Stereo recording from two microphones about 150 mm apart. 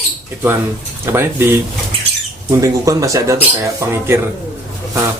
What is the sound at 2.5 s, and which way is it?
Speech, 20° right (ahead or behind).